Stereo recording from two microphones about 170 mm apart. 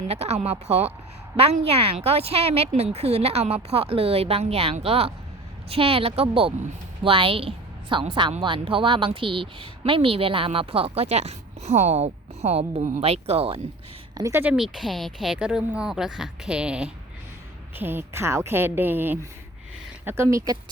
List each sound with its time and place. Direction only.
0.1 s a woman's voice: 40° right (ahead or behind)
1.4 s a woman's voice: 35° right (ahead or behind)
14.2 s a woman's voice: 15° right (ahead or behind)
14.5 s a woman's voice: centre (ahead or behind); by 20.6 s 20° right (ahead or behind)